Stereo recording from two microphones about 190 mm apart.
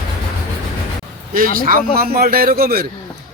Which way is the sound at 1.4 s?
50° right (ahead or behind).